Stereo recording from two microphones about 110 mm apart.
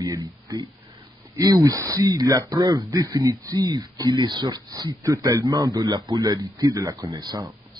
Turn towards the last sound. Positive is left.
turn(degrees=-35)  # may be behind; listen again after turning